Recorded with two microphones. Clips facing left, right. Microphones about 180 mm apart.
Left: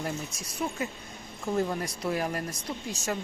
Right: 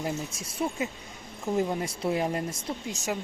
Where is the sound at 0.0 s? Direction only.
25° right (ahead or behind).